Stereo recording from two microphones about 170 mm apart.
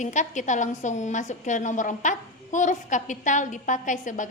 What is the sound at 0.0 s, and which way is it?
A woman's voice, 45° left (ahead or behind).